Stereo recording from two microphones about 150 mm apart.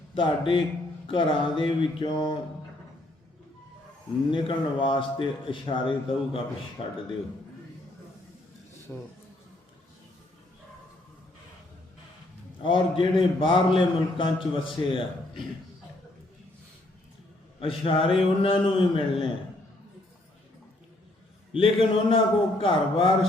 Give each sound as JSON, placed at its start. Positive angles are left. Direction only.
{"t": 0.1, "sound": "a man's voice", "side_deg": 35}
{"t": 4.3, "sound": "a man's voice", "side_deg": 35}
{"t": 8.9, "sound": "a man's voice", "side_deg": 10}
{"t": 12.6, "sound": "a man's voice", "side_deg": 35}
{"t": 17.6, "sound": "a man's voice", "side_deg": 35}
{"t": 21.5, "sound": "a man's voice", "side_deg": 35}